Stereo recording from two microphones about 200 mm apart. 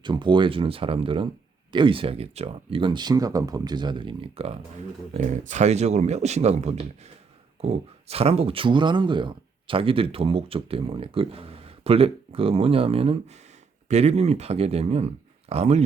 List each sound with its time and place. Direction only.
0.0 s speech: 25° right (ahead or behind)